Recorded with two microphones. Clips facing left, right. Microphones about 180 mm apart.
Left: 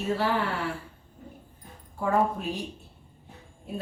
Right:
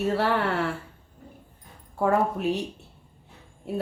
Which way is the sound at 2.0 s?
65° right (ahead or behind).